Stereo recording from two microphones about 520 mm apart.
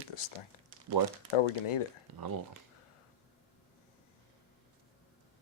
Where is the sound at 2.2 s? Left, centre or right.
Right.